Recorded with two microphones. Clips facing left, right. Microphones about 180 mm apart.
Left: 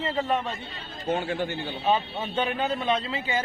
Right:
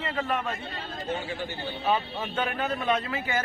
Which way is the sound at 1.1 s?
55° left (ahead or behind).